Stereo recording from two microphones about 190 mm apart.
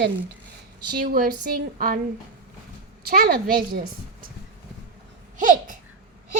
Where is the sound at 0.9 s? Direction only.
50° right (ahead or behind).